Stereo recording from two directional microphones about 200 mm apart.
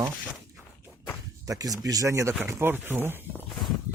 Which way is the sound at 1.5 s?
15° right (ahead or behind).